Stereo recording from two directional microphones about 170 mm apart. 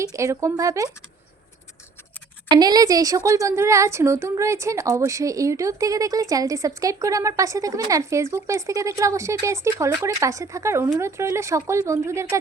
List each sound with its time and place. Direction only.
0.0 s a woman's voice: 20° right (ahead or behind)
2.5 s a woman's voice: 25° right (ahead or behind)